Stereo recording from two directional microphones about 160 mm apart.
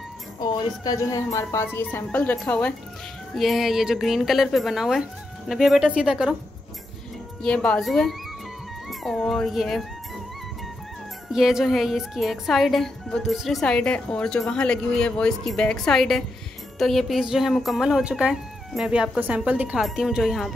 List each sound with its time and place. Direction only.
0.4 s a woman's voice: 25° left (ahead or behind)
3.3 s speech: centre (ahead or behind)
7.4 s speech: 5° left (ahead or behind)
11.2 s speech: centre (ahead or behind)